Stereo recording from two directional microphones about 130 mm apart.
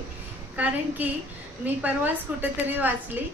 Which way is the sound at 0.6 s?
10° right (ahead or behind).